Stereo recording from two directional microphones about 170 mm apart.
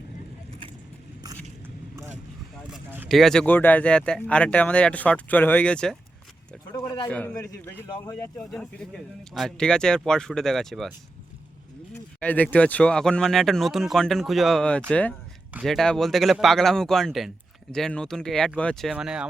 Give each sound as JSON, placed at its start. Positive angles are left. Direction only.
{"t": 2.6, "sound": "a sound", "side_deg": -5}
{"t": 3.1, "sound": "speech", "side_deg": 0}
{"t": 6.5, "sound": "a sound", "side_deg": 15}
{"t": 7.1, "sound": "speech", "side_deg": 10}
{"t": 7.9, "sound": "speech", "side_deg": 20}
{"t": 8.4, "sound": "speech", "side_deg": 0}
{"t": 12.2, "sound": "speech", "side_deg": 10}